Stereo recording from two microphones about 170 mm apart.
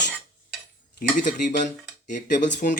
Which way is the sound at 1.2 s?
50° left (ahead or behind).